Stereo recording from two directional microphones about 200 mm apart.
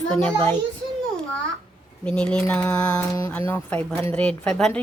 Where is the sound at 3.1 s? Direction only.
15° left (ahead or behind).